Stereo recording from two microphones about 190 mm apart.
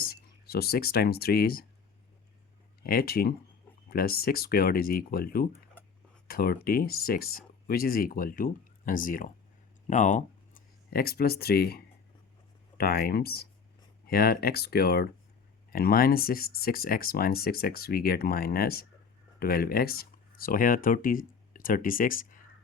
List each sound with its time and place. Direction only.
0.0 s speech: 55° left (ahead or behind)
2.8 s speech: 50° left (ahead or behind)
6.2 s a sound: 50° left (ahead or behind)
6.7 s speech: 50° left (ahead or behind)